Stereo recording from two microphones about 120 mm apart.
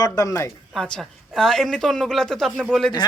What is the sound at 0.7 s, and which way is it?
A woman's voice, 5° left (ahead or behind).